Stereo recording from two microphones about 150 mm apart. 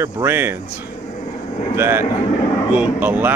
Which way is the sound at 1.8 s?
15° right (ahead or behind).